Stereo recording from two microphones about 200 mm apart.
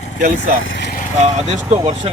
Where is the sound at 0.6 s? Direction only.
55° left (ahead or behind).